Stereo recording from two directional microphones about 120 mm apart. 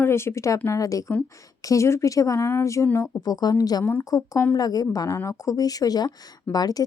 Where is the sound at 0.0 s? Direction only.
20° left (ahead or behind).